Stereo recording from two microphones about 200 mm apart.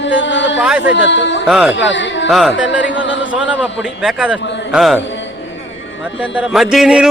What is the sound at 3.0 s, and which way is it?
Speech, 70° left (ahead or behind).